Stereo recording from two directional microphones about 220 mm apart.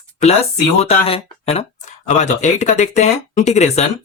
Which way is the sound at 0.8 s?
25° left (ahead or behind).